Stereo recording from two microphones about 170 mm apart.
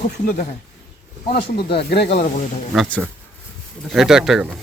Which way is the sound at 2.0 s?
40° left (ahead or behind).